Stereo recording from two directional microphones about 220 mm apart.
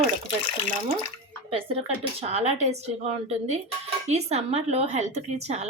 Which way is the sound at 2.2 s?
30° right (ahead or behind).